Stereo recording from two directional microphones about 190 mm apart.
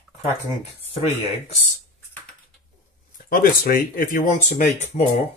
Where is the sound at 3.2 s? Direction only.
50° left (ahead or behind).